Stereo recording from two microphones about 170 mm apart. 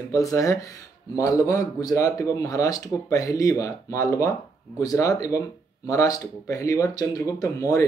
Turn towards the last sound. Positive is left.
turn(degrees=20)  # may be behind; listen again after turning